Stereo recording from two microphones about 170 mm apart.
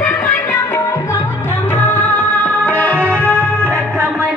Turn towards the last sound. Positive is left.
turn(degrees=5)  # may be behind; listen again after turning